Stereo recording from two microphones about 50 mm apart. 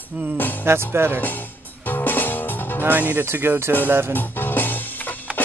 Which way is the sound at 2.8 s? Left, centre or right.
Right.